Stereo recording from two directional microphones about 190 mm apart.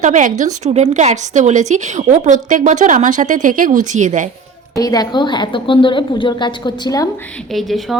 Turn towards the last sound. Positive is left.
turn(degrees=0)  # may be behind; listen again after turning